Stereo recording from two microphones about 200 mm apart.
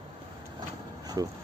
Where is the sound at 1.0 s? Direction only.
20° right (ahead or behind).